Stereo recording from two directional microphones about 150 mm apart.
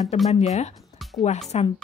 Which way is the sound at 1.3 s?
50° left (ahead or behind).